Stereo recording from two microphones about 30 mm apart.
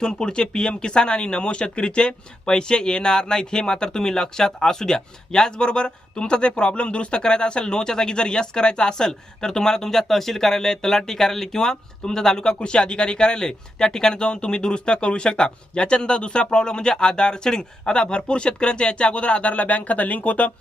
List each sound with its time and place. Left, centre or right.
0.0 s speech: left
12.5 s speech: left
19.6 s speech: left